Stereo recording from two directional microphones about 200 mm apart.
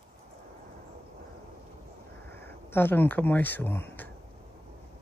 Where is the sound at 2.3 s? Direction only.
10° left (ahead or behind).